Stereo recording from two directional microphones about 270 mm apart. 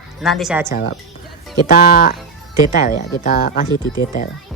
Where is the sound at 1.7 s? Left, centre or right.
Left.